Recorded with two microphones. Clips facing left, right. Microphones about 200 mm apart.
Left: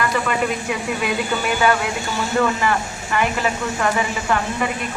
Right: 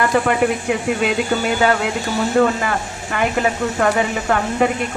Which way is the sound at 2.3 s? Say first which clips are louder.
Right 2 dB; 45° right (ahead or behind).